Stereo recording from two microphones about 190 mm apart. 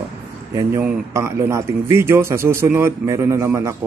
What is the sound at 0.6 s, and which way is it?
A man's voice, 15° right (ahead or behind).